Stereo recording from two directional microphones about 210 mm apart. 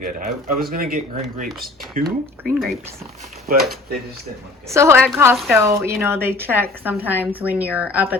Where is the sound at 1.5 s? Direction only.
Centre (ahead or behind).